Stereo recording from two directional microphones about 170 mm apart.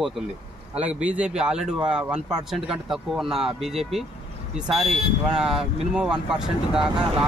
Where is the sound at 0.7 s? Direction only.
10° right (ahead or behind).